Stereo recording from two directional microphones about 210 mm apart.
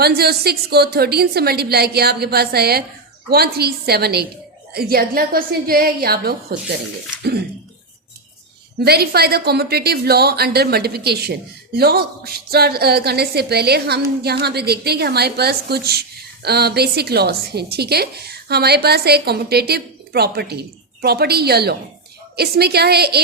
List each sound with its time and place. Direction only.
0.0 s a woman's voice: 50° right (ahead or behind)
8.8 s a woman's voice: 50° right (ahead or behind)